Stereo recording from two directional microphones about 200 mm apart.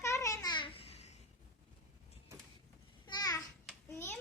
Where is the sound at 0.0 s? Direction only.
15° left (ahead or behind).